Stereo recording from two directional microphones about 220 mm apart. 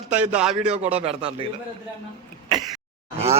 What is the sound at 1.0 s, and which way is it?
Speech, 25° right (ahead or behind).